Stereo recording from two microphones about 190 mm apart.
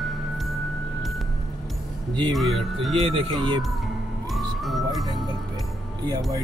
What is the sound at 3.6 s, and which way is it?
Emergency vehicle, centre (ahead or behind).